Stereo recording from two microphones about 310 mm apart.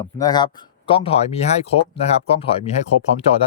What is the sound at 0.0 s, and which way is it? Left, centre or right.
Speech, centre.